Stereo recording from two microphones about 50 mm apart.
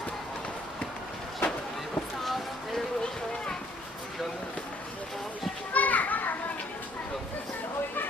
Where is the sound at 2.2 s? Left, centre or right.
Centre.